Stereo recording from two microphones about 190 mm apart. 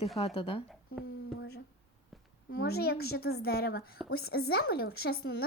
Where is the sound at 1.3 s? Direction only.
60° left (ahead or behind).